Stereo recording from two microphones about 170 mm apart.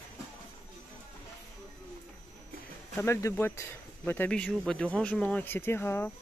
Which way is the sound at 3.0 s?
15° left (ahead or behind).